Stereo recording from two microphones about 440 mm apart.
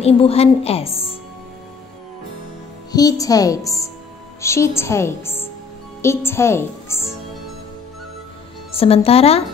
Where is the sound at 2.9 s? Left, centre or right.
Centre.